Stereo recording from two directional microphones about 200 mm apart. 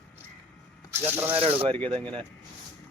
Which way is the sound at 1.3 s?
30° right (ahead or behind).